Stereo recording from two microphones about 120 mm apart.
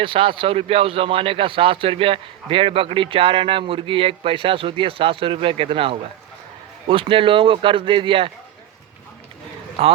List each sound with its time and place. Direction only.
0.0 s a man's voice: 45° right (ahead or behind)
9.8 s a man's voice: 50° right (ahead or behind)